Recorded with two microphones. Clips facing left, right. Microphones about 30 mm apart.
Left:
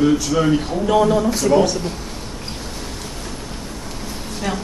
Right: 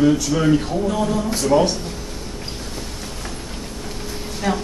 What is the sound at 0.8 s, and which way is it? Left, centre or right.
Speech, left.